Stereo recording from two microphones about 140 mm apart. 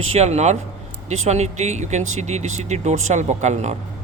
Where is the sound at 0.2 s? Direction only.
50° right (ahead or behind).